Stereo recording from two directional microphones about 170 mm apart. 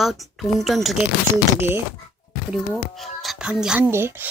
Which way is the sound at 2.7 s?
Centre (ahead or behind).